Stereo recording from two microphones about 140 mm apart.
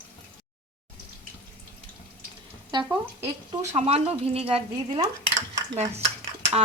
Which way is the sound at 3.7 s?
50° right (ahead or behind).